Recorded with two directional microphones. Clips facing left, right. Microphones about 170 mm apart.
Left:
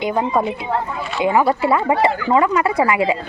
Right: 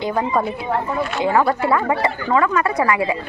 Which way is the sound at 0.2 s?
20° left (ahead or behind).